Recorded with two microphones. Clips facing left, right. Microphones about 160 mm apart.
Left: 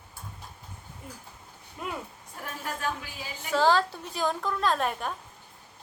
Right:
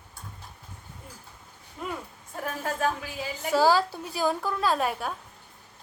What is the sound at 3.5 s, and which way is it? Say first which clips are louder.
A woman's voice: right 1 dB; 10° right (ahead or behind).